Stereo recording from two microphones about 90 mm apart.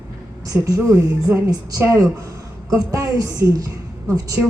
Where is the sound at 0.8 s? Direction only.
30° right (ahead or behind).